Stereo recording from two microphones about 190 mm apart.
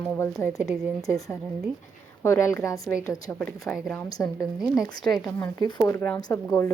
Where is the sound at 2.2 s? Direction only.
15° left (ahead or behind).